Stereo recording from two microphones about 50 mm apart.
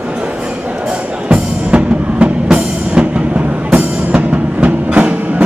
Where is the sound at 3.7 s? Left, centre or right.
Right.